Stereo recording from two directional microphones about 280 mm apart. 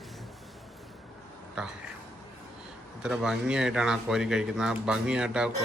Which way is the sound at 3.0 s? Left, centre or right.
Centre.